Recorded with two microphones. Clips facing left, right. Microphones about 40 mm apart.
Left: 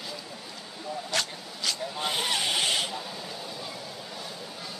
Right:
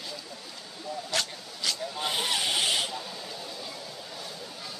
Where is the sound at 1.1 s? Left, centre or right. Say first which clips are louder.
Left 1 dB; centre.